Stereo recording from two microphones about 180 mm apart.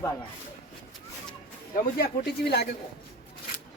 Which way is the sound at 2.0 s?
60° left (ahead or behind).